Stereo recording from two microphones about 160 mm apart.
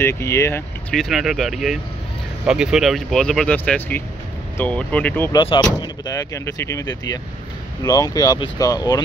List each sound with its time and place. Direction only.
0.0 s speech: 15° left (ahead or behind)
0.9 s speech: centre (ahead or behind)
5.3 s speech: 35° left (ahead or behind)